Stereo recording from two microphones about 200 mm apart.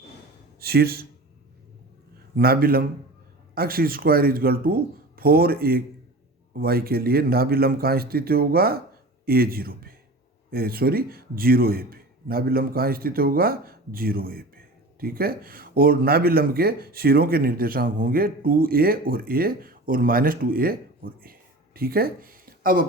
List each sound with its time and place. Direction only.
0.6 s speech: 50° right (ahead or behind)
2.3 s speech: 50° right (ahead or behind)